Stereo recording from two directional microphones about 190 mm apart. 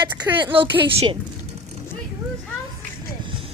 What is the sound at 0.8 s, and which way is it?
Speech, 25° right (ahead or behind).